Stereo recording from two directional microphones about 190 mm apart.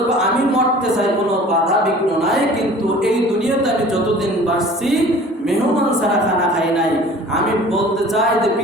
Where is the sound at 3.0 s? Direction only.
5° right (ahead or behind).